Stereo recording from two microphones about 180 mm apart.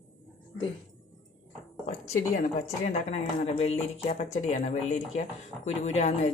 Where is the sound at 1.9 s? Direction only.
40° left (ahead or behind).